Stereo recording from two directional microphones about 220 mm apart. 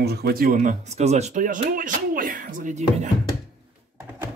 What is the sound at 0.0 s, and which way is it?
Speech, 45° right (ahead or behind).